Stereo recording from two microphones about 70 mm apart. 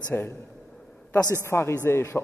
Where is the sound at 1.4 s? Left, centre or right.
Left.